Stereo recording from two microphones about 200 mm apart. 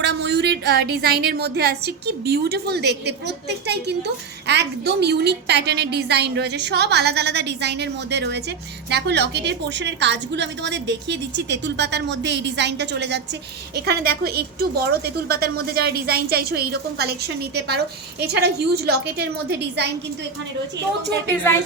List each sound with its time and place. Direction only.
0.0 s a woman's voice: 60° right (ahead or behind)